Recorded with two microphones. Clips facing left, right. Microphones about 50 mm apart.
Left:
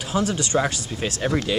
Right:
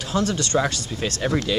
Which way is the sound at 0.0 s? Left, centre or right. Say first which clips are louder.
Even; centre.